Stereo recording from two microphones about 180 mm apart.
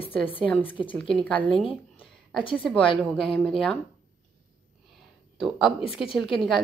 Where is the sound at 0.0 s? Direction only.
30° left (ahead or behind).